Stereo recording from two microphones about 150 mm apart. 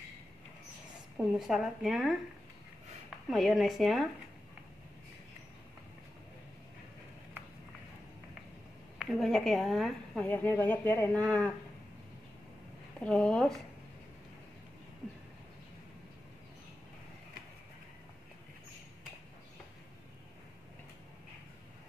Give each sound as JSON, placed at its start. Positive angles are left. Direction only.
{"t": 1.1, "sound": "speech", "side_deg": 0}
{"t": 3.3, "sound": "speech", "side_deg": 0}
{"t": 8.9, "sound": "a woman's voice", "side_deg": 0}
{"t": 10.2, "sound": "speech", "side_deg": 15}
{"t": 13.0, "sound": "speech", "side_deg": 5}